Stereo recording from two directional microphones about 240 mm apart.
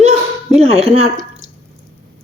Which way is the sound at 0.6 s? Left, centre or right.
Right.